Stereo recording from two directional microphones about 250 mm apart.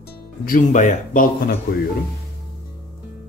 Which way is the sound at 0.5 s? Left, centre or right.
Left.